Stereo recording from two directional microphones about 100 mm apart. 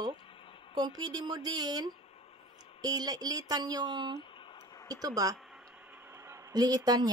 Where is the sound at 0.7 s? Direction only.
45° right (ahead or behind).